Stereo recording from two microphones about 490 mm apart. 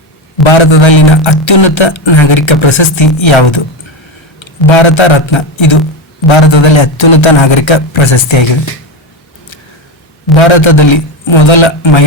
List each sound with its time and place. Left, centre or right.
0.4 s a man's voice: left
10.3 s a man's voice: left